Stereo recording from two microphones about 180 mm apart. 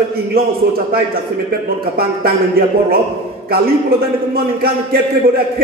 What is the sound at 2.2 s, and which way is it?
Speech, 55° right (ahead or behind).